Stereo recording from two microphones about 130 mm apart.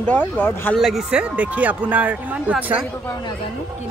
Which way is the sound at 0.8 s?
Centre (ahead or behind).